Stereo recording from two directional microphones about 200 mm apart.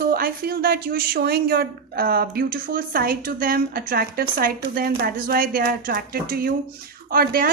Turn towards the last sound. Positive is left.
turn(degrees=-45)  # may be behind; listen again after turning